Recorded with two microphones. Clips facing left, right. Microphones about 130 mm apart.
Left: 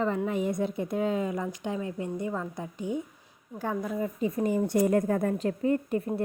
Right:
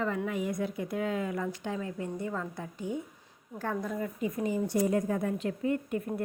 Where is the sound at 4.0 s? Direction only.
30° left (ahead or behind).